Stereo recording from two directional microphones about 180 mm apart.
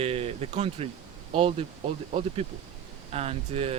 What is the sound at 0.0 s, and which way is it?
Speech, 35° right (ahead or behind).